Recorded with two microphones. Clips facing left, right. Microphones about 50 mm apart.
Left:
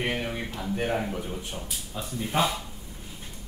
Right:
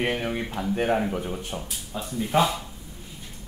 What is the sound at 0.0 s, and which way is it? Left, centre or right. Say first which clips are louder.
Speech: right 3 dB; centre.